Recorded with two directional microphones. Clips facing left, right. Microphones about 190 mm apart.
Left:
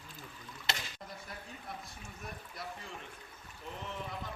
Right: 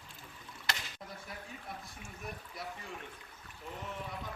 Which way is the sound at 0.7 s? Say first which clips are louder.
Left 1 dB; 25° left (ahead or behind).